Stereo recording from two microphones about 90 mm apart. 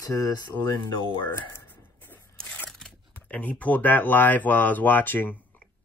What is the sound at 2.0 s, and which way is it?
Speech, 15° left (ahead or behind).